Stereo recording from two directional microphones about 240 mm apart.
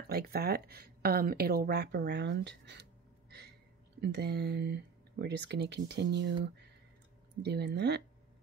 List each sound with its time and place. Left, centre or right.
0.1 s speech: right